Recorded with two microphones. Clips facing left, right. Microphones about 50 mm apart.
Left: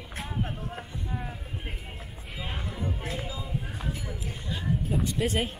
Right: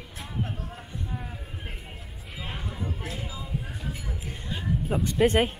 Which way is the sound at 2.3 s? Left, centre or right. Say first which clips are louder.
Left 1 dB; centre.